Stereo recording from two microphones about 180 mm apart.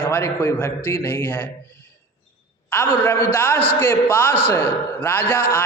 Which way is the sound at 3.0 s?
10° left (ahead or behind).